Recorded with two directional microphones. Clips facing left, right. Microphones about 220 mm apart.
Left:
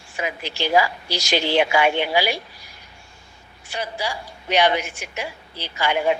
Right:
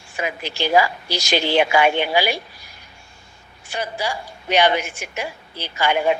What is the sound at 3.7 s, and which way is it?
A woman's voice, 50° right (ahead or behind).